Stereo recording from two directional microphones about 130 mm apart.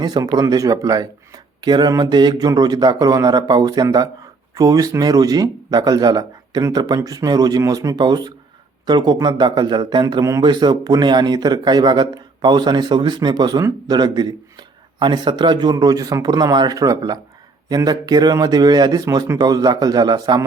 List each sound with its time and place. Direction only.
0.0 s speech: 30° right (ahead or behind)